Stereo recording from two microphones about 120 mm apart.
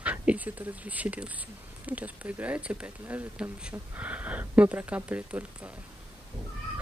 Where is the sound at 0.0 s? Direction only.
10° right (ahead or behind).